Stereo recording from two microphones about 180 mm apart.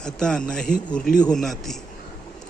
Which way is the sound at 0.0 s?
5° left (ahead or behind).